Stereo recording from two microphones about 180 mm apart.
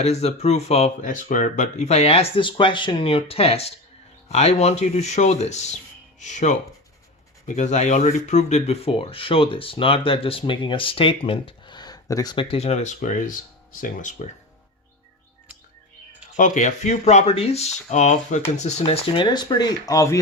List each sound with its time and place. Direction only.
0.0 s speech: 35° left (ahead or behind)
16.4 s speech: 40° left (ahead or behind); by 20.1 s 20° left (ahead or behind)